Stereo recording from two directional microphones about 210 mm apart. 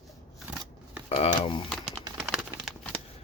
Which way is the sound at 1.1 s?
25° left (ahead or behind).